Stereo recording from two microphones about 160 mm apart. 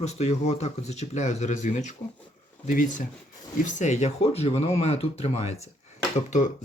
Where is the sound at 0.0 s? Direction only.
45° left (ahead or behind).